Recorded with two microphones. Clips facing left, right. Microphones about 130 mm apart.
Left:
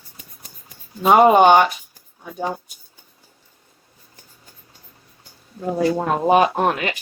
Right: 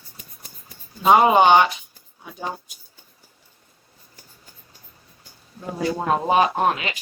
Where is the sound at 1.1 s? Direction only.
50° left (ahead or behind).